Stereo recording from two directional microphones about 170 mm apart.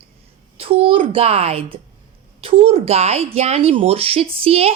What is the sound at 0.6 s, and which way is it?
Speech, 30° right (ahead or behind).